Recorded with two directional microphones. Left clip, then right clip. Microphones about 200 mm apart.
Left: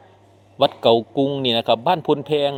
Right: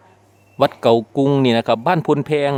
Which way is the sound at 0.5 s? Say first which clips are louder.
Right 1 dB; 25° right (ahead or behind).